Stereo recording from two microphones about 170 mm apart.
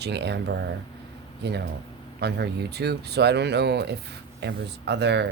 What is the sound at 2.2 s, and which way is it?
Speech, 75° right (ahead or behind).